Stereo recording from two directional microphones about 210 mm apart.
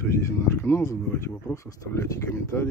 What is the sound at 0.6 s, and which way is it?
Speech, 15° left (ahead or behind).